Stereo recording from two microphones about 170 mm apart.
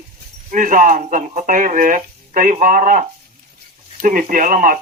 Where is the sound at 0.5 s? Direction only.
50° right (ahead or behind).